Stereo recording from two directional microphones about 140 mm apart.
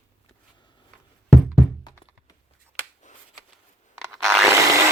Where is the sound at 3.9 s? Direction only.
Centre (ahead or behind).